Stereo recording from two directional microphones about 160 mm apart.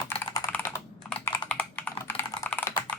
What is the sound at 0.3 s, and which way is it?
Computer keyboard, 15° left (ahead or behind).